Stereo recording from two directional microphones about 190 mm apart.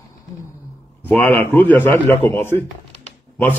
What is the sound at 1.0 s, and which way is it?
A man's voice, 10° left (ahead or behind).